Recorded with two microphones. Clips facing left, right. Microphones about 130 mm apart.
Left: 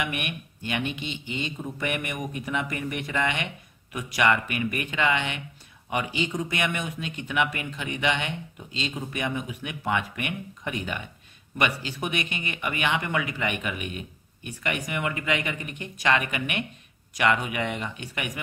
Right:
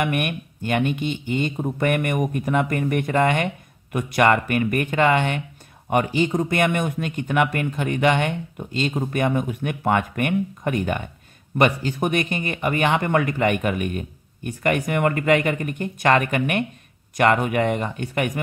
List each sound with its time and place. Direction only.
0.0 s speech: 50° right (ahead or behind)